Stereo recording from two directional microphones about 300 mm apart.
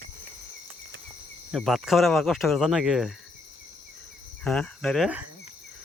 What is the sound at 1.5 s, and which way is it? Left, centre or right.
Speech, centre.